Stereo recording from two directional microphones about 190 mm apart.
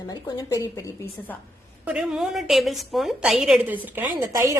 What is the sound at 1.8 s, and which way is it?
A woman's voice, 5° right (ahead or behind).